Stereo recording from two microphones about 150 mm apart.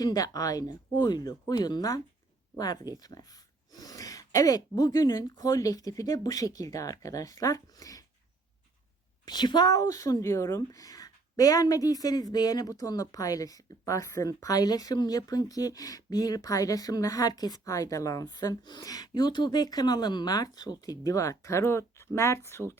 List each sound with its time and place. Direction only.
0.0 s speech: 25° left (ahead or behind)
9.2 s speech: 30° left (ahead or behind)